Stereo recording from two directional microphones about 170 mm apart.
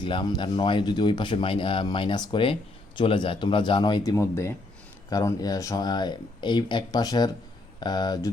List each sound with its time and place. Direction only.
0.0 s speech: 30° left (ahead or behind)